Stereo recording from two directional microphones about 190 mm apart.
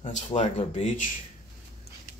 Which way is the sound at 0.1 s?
35° left (ahead or behind).